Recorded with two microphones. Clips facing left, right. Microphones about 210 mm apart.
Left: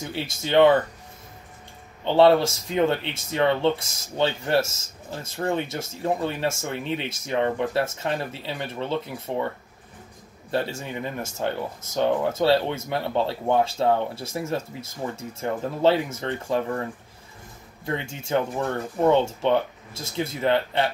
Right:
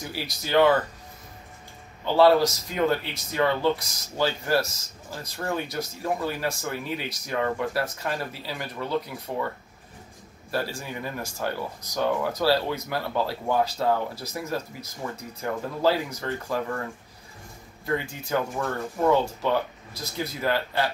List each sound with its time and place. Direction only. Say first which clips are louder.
0.0 s speech: left 3 dB; 25° left (ahead or behind)
2.0 s speech: left 1 dB; 25° left (ahead or behind)
10.5 s speech: left 3 dB; 25° left (ahead or behind)